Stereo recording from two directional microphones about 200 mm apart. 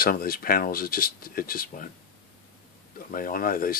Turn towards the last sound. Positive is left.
turn(degrees=45)  # may be behind; listen again after turning